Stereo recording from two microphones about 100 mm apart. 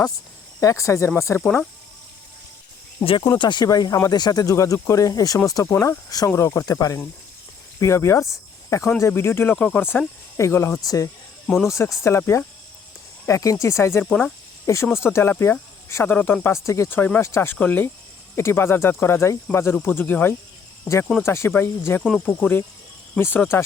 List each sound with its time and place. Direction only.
0.6 s speech: 35° left (ahead or behind)
3.0 s speech: 65° left (ahead or behind)
3.2 s speech: 50° left (ahead or behind); by 9.9 s 15° left (ahead or behind)
10.3 s speech: 30° left (ahead or behind)
11.4 s speech: 5° left (ahead or behind)
11.7 s speech: 30° left (ahead or behind)
14.0 s cricket: 10° left (ahead or behind)
14.9 s speech: 25° left (ahead or behind)